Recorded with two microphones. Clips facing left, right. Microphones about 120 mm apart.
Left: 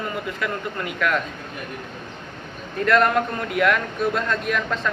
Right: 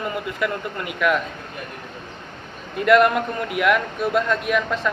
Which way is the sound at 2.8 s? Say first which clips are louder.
Right 3 dB; 10° right (ahead or behind).